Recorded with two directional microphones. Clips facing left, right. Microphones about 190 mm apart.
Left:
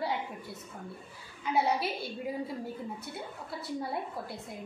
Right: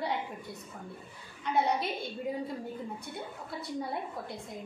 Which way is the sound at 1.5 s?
5° left (ahead or behind).